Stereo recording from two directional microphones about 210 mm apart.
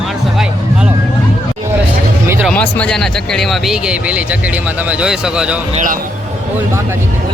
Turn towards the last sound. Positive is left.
turn(degrees=-40)  # may be behind; listen again after turning